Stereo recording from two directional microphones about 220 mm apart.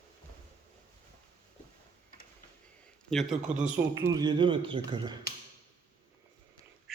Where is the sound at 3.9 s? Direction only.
15° right (ahead or behind).